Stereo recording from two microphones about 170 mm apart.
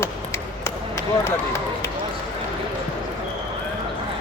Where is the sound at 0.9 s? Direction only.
15° left (ahead or behind).